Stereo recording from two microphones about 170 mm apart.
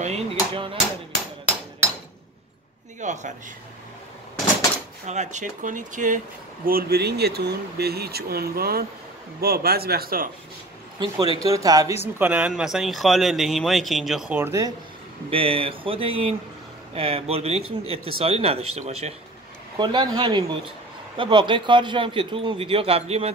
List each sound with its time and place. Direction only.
0.0 s a sound: 35° right (ahead or behind)
3.0 s a man's voice: 45° right (ahead or behind)
5.0 s speech: 45° right (ahead or behind); by 10.3 s 60° right (ahead or behind)
11.0 s a man's voice: 30° right (ahead or behind)
12.2 s speech: 10° right (ahead or behind)
15.2 s speech: 35° right (ahead or behind)
19.8 s a man's voice: 25° right (ahead or behind)